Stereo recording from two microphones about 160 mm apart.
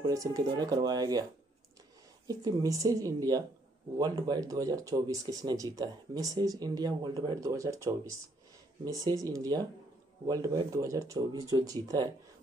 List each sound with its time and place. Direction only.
0.0 s speech: 20° right (ahead or behind)
2.2 s speech: 25° right (ahead or behind)